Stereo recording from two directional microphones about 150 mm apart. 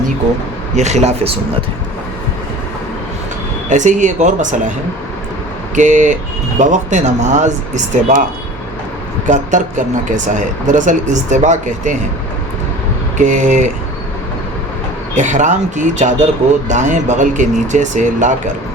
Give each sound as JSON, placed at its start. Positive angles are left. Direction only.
{"t": 0.8, "sound": "speech", "side_deg": -50}
{"t": 3.7, "sound": "speech", "side_deg": -55}
{"t": 5.7, "sound": "speech", "side_deg": -55}
{"t": 9.2, "sound": "speech", "side_deg": -55}
{"t": 13.1, "sound": "speech", "side_deg": -55}
{"t": 15.1, "sound": "speech", "side_deg": -55}